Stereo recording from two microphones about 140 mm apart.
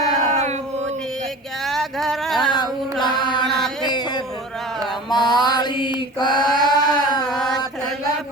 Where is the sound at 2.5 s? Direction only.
30° left (ahead or behind).